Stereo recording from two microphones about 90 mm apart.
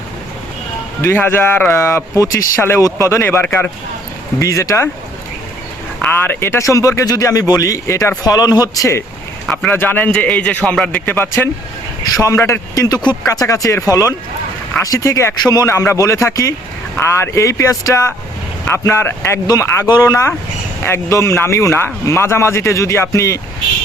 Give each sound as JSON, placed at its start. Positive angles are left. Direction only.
{"t": 1.0, "sound": "speech", "side_deg": 25}
{"t": 4.4, "sound": "speech", "side_deg": 40}
{"t": 6.0, "sound": "a man's voice", "side_deg": 25}
{"t": 9.6, "sound": "a man's voice", "side_deg": 20}
{"t": 12.0, "sound": "speech", "side_deg": 40}
{"t": 15.4, "sound": "a man's voice", "side_deg": 45}
{"t": 15.7, "sound": "speech", "side_deg": 30}
{"t": 18.7, "sound": "speech", "side_deg": 25}
{"t": 19.5, "sound": "speech", "side_deg": 40}